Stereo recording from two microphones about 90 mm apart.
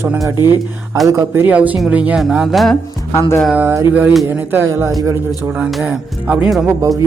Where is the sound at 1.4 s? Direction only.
15° right (ahead or behind).